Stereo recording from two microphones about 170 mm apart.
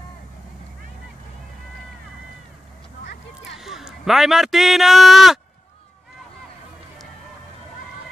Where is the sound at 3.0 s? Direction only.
90° left.